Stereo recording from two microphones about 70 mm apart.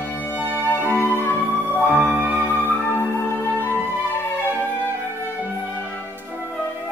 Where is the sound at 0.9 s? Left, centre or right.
Left.